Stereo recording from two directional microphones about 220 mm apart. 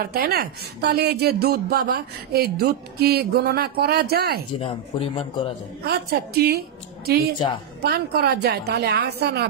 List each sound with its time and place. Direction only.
0.0 s speech: 45° right (ahead or behind)
4.6 s speech: 25° left (ahead or behind)
5.9 s speech: 45° right (ahead or behind)
7.8 s speech: 45° right (ahead or behind)